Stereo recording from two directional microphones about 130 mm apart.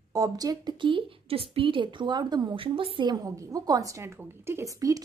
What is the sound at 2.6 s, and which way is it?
Speech, 45° right (ahead or behind).